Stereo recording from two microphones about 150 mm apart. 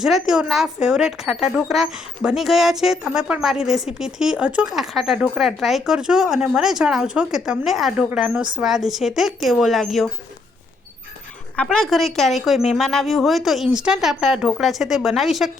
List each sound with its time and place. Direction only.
0.0 s speech: 5° right (ahead or behind)
11.5 s speech: 5° left (ahead or behind)